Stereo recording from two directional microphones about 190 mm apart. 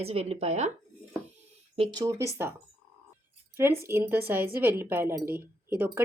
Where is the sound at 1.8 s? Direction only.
20° right (ahead or behind).